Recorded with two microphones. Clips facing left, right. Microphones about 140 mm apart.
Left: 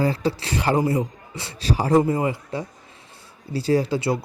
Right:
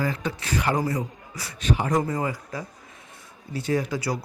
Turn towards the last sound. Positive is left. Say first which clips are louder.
# left 5 dB
turn(degrees=30)  # may be behind; listen again after turning